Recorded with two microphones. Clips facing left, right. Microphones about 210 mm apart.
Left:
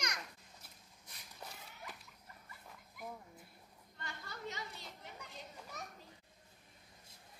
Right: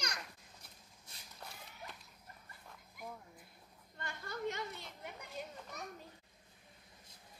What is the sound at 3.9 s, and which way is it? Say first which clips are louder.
Chatter: right 5 dB; 50° right (ahead or behind).